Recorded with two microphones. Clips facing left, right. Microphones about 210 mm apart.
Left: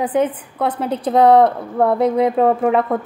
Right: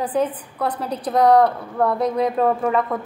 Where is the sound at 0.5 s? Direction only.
25° left (ahead or behind).